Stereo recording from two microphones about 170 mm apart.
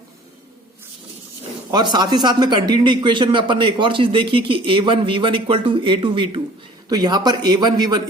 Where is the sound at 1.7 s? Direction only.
25° right (ahead or behind).